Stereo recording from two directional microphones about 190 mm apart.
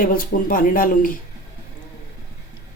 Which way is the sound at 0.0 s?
50° left (ahead or behind).